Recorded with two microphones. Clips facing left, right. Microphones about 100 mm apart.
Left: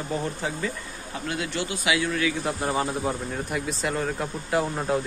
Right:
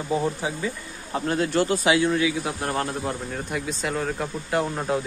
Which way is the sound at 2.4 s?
Centre (ahead or behind).